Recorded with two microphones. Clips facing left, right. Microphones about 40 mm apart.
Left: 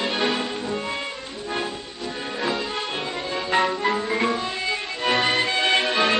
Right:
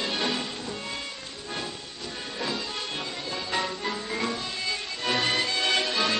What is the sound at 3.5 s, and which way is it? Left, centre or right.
Music, left.